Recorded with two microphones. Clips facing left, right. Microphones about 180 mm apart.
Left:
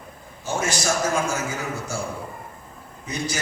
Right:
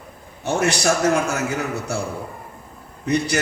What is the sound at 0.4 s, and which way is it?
A man's voice, 65° right (ahead or behind).